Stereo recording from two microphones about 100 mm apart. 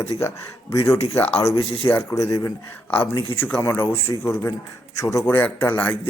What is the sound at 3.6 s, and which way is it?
A man's voice, 20° left (ahead or behind).